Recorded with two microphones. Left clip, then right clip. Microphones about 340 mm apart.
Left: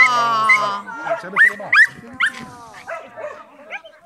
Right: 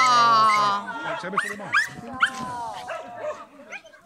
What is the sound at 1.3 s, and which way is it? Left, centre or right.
Speech, centre.